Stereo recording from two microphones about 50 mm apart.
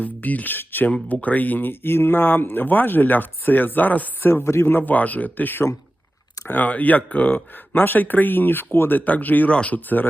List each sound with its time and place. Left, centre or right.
0.0 s speech: left
1.0 s speech: left
9.0 s speech: left
9.5 s speech: left
9.7 s speech: left